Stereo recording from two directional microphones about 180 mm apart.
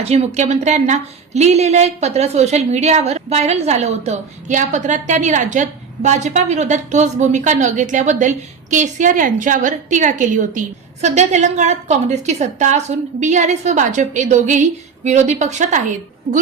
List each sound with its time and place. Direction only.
0.0 s a woman's voice: 35° right (ahead or behind)